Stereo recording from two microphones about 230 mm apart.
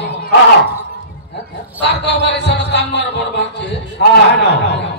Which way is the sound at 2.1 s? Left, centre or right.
Left.